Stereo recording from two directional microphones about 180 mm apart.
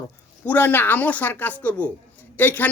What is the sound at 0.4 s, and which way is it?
A man's voice, 10° left (ahead or behind).